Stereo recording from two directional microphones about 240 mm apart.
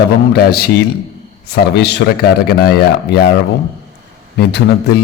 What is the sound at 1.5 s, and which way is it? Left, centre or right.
A man's voice, left.